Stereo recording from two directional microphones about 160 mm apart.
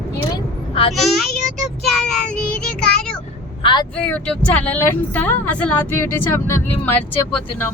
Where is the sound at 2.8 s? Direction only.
5° left (ahead or behind).